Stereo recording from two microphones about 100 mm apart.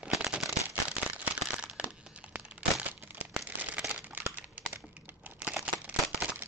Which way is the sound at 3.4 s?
15° right (ahead or behind).